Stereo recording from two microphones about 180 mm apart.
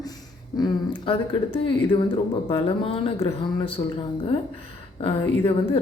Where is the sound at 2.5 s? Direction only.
30° left (ahead or behind).